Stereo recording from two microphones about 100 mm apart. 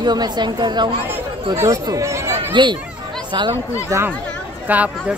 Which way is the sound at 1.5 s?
30° right (ahead or behind).